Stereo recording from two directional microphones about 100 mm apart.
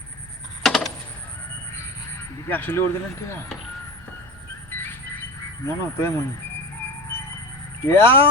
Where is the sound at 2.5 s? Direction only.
20° left (ahead or behind).